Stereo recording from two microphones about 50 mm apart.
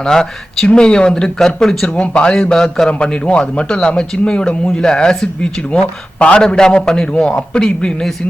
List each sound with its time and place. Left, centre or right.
0.0 s speech: centre
2.0 s a man's voice: left